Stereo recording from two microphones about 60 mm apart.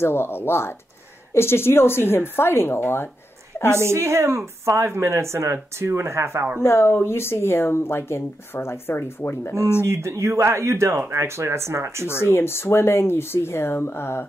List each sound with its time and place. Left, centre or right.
0.0 s a woman's voice: left
3.8 s speech: right
6.6 s speech: left
9.8 s speech: right
12.1 s speech: left